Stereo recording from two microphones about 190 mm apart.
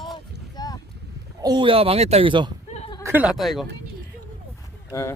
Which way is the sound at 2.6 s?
35° left (ahead or behind).